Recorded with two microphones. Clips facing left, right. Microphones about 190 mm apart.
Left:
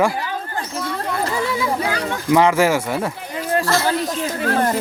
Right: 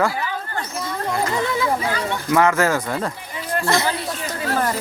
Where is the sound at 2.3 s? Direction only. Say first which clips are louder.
Left 3 dB; 15° left (ahead or behind).